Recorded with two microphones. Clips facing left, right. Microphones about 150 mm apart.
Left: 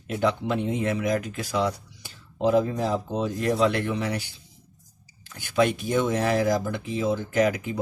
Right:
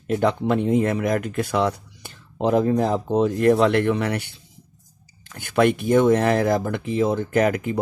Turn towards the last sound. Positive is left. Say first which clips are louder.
# right 3 dB
turn(degrees=-55)  # may be behind; listen again after turning